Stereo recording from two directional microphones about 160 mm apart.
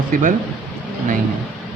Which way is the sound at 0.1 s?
55° right (ahead or behind).